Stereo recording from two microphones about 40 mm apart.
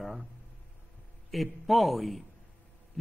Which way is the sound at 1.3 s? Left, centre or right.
Centre.